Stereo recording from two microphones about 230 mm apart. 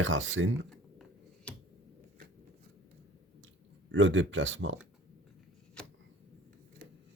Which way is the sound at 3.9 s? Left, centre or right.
Right.